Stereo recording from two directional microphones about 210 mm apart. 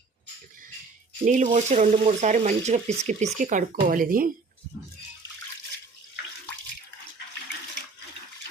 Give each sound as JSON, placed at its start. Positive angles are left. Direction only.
{"t": 1.2, "sound": "speech", "side_deg": -40}